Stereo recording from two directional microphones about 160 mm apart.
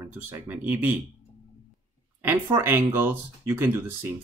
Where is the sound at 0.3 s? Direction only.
10° right (ahead or behind).